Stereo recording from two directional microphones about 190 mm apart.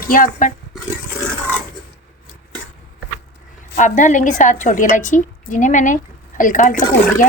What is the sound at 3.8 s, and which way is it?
A woman's voice, 40° left (ahead or behind).